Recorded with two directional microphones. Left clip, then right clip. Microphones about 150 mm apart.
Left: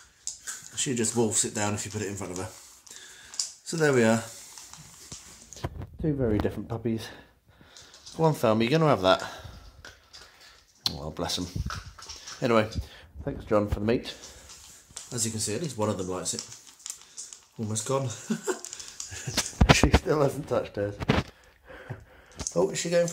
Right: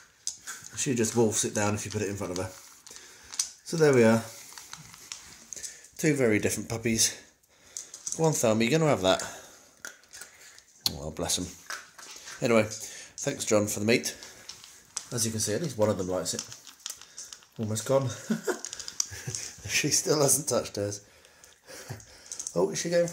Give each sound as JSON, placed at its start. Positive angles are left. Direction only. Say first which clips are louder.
{"t": 0.7, "sound": "speech", "louder": "right 1 dB", "side_deg": -10}
{"t": 3.6, "sound": "speech", "louder": "right 2 dB", "side_deg": 0}
{"t": 5.5, "sound": "a sound", "louder": "left 3 dB", "side_deg": 20}
{"t": 5.9, "sound": "speech", "louder": "right 4 dB", "side_deg": -20}
{"t": 6.4, "sound": "speech", "louder": "right 1 dB", "side_deg": -5}
{"t": 8.2, "sound": "speech", "louder": "left 1 dB", "side_deg": 0}
{"t": 10.8, "sound": "a sound", "louder": "left 1 dB", "side_deg": 0}
{"t": 12.4, "sound": "speech", "louder": "even", "side_deg": 0}
{"t": 15.1, "sound": "speech", "louder": "right 1 dB", "side_deg": -5}
{"t": 17.6, "sound": "speech", "louder": "right 3 dB", "side_deg": 0}
{"t": 19.8, "sound": "speech", "louder": "left 2 dB", "side_deg": 0}
{"t": 21.6, "sound": "a sound", "louder": "left 1 dB", "side_deg": 0}
{"t": 22.5, "sound": "speech", "louder": "left 1 dB", "side_deg": 0}